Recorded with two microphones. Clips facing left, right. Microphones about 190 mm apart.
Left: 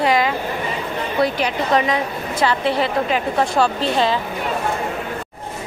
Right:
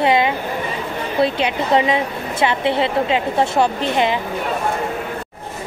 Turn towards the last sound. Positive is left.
turn(degrees=-20)  # may be behind; listen again after turning